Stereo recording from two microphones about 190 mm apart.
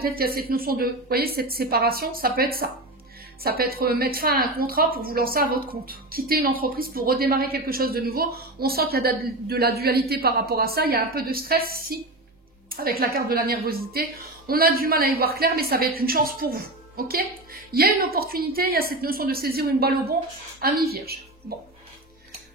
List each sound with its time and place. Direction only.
0.0 s a woman's voice: 50° right (ahead or behind)